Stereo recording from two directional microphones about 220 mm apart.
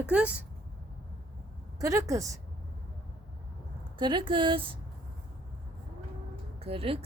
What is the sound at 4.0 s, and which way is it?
Speech, 20° right (ahead or behind).